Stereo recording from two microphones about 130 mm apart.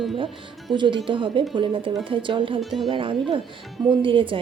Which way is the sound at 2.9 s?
40° right (ahead or behind).